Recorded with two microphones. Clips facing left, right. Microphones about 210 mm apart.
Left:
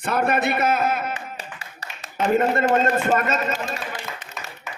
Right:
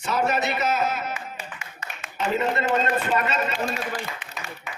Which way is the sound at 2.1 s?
50° left (ahead or behind).